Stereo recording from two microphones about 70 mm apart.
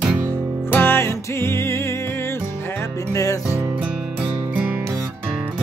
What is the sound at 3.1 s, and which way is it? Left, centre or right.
Music, left.